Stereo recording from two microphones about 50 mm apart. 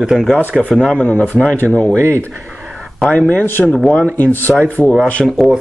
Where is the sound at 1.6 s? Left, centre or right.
Left.